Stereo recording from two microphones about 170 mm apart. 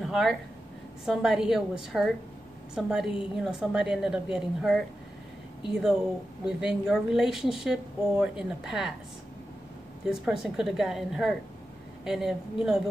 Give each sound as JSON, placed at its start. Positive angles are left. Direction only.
{"t": 0.0, "sound": "a woman's voice", "side_deg": 0}
{"t": 10.0, "sound": "a woman's voice", "side_deg": -5}